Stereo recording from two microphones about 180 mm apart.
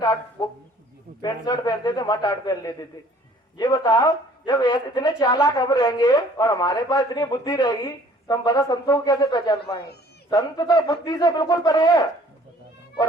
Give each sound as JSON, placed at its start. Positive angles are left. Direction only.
{"t": 0.0, "sound": "a man's voice", "side_deg": 20}